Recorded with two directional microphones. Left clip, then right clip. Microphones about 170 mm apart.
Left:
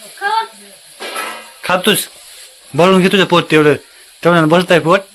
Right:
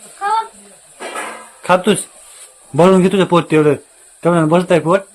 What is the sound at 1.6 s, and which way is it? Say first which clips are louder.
Speech: even; 5° right (ahead or behind).